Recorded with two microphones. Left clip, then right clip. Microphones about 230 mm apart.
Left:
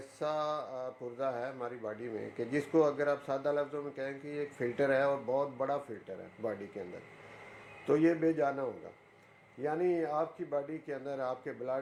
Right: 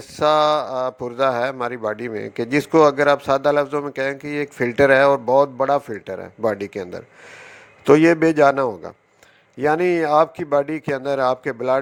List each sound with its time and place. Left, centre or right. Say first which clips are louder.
0.2 s a man's voice: right 19 dB; right
7.9 s a man's voice: right 15 dB; right